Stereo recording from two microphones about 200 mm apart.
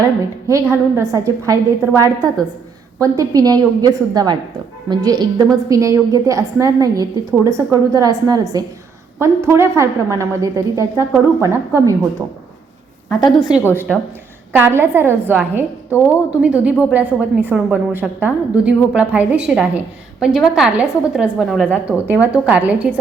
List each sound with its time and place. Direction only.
0.0 s a woman's voice: 15° right (ahead or behind)
13.4 s a woman's voice: 5° right (ahead or behind)
14.5 s a woman's voice: 10° right (ahead or behind)
15.9 s a woman's voice: 15° left (ahead or behind)
16.4 s a woman's voice: 5° right (ahead or behind)